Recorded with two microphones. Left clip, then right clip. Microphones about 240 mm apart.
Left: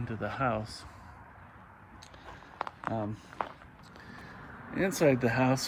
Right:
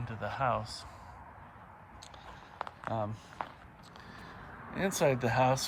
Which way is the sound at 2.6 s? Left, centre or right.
Centre.